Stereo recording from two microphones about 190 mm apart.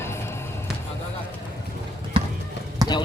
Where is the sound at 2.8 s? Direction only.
20° right (ahead or behind).